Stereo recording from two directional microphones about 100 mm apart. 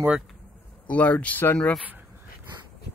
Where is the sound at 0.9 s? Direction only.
15° left (ahead or behind).